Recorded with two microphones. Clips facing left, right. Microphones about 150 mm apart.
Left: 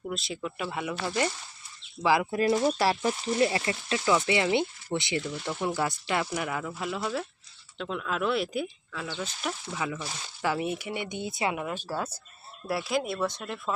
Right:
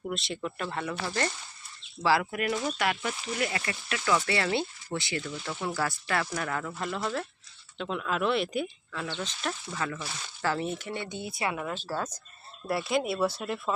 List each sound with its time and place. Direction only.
0.1 s speech: centre (ahead or behind)
2.3 s speech: 30° left (ahead or behind); by 12.1 s 10° left (ahead or behind)
12.6 s speech: centre (ahead or behind)